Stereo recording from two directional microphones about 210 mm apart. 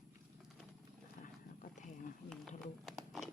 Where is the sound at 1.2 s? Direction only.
40° left (ahead or behind).